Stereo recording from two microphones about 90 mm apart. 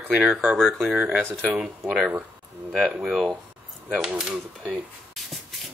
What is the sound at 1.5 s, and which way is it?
Speech, 15° right (ahead or behind).